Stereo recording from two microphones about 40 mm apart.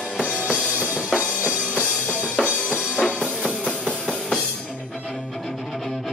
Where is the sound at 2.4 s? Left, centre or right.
Right.